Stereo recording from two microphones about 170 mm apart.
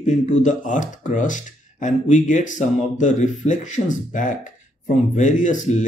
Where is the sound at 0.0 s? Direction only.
45° left (ahead or behind).